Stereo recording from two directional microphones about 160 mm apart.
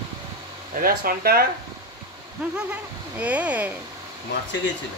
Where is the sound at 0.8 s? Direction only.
65° right (ahead or behind).